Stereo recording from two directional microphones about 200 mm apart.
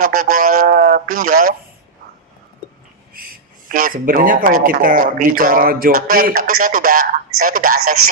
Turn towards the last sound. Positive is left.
turn(degrees=-45)  # may be behind; listen again after turning